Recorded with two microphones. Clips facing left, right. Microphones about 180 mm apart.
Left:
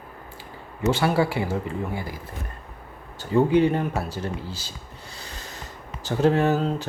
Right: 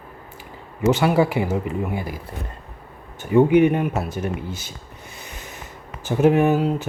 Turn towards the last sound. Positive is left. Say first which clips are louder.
# right 4 dB
turn(degrees=-10)  # may be behind; listen again after turning